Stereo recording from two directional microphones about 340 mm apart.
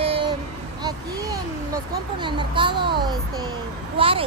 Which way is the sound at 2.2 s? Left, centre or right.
Centre.